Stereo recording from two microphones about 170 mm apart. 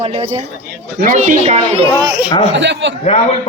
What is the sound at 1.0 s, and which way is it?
Speech, 50° right (ahead or behind).